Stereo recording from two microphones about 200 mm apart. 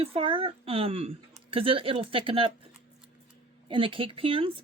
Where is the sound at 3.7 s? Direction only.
25° right (ahead or behind).